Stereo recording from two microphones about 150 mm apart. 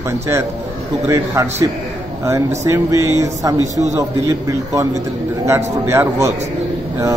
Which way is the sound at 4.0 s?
20° right (ahead or behind).